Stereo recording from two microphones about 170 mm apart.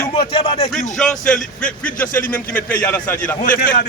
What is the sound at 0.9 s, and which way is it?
A man's voice, 5° left (ahead or behind).